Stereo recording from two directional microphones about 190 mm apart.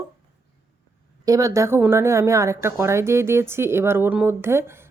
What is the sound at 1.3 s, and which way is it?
Speech, 15° right (ahead or behind).